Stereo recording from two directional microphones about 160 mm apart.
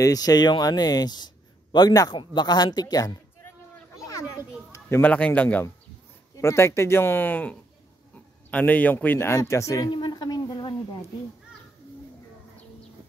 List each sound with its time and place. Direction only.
0.0 s speech: 25° left (ahead or behind)
4.0 s children playing: 20° left (ahead or behind)
4.7 s a man's voice: 15° left (ahead or behind)